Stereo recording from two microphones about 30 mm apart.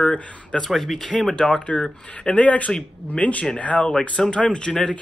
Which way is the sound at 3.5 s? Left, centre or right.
Left.